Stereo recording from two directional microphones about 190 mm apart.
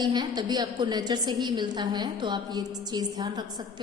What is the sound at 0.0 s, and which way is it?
A woman's voice, 20° right (ahead or behind).